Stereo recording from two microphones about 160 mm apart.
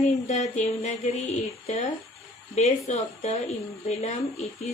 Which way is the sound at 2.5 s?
45° left (ahead or behind).